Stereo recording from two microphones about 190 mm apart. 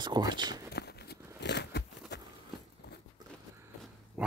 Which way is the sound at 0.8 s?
60° left (ahead or behind).